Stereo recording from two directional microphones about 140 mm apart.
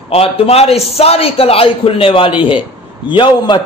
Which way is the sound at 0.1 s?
45° left (ahead or behind).